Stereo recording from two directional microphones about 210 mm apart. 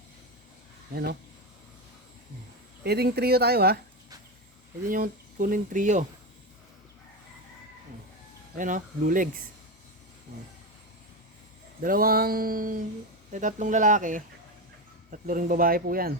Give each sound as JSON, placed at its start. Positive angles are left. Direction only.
{"t": 2.8, "sound": "speech", "side_deg": -50}
{"t": 4.9, "sound": "speech", "side_deg": -40}
{"t": 8.5, "sound": "speech", "side_deg": -40}
{"t": 11.8, "sound": "speech", "side_deg": -45}